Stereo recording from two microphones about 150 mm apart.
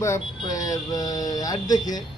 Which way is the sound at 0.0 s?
20° left (ahead or behind).